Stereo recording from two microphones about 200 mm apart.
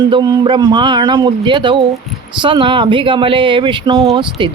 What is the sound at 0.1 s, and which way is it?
Speech, 20° right (ahead or behind).